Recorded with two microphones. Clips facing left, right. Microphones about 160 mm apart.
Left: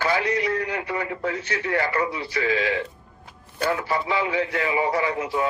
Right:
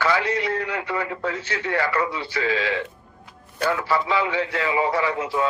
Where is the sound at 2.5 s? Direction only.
25° left (ahead or behind).